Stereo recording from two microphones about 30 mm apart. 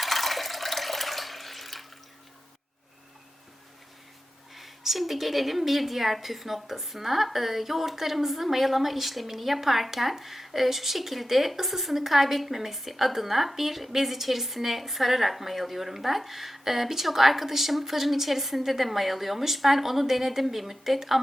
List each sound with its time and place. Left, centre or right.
0.0 s water: centre
4.5 s a woman's voice: centre